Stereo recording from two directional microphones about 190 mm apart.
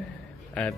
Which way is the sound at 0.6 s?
5° left (ahead or behind).